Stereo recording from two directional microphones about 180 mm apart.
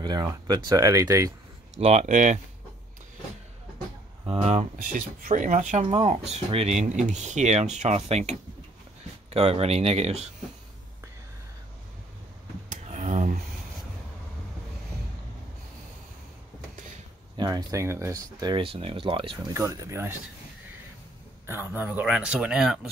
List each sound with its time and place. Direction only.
0.0 s speech: 20° right (ahead or behind)
1.8 s speech: 40° right (ahead or behind)
4.3 s speech: 35° right (ahead or behind)
4.7 s speech: 50° right (ahead or behind)
12.6 s a sound: 45° right (ahead or behind)
17.4 s speech: 20° right (ahead or behind)
19.5 s speech: 15° right (ahead or behind)
21.5 s speech: 10° right (ahead or behind)